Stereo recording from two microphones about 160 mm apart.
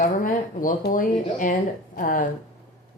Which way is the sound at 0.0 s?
60° left (ahead or behind).